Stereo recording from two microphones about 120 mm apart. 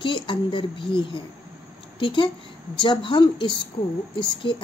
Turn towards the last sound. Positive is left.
turn(degrees=45)  # may be behind; listen again after turning